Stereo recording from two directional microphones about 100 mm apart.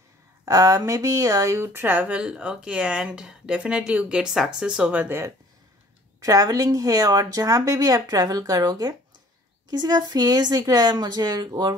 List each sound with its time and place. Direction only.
0.5 s speech: 35° right (ahead or behind); by 5.3 s 20° right (ahead or behind)
6.2 s speech: 35° right (ahead or behind)